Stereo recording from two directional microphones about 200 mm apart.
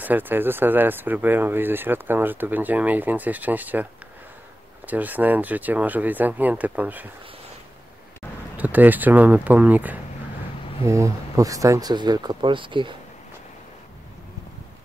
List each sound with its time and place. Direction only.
0.0 s speech: 10° right (ahead or behind)
4.8 s speech: 10° right (ahead or behind)
8.5 s speech: 10° right (ahead or behind); by 12.9 s 25° right (ahead or behind)